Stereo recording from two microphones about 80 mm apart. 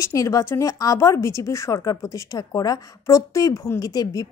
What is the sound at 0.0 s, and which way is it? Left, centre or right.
A woman's voice, left.